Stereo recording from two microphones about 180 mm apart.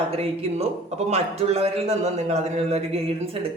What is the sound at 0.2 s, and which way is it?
Speech, 35° right (ahead or behind).